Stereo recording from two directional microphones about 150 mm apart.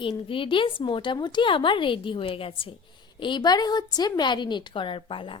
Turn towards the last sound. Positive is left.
turn(degrees=35)  # may be behind; listen again after turning